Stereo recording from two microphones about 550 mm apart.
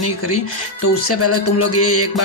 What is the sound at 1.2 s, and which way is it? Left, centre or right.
Speech, left.